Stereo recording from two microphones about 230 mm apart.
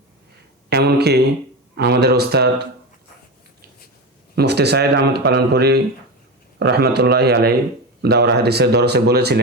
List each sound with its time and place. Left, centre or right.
0.7 s speech: right
4.4 s speech: right